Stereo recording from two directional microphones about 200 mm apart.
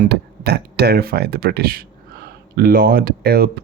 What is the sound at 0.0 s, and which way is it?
Speech, 55° right (ahead or behind).